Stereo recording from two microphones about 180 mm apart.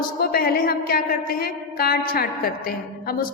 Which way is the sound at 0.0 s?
55° left (ahead or behind).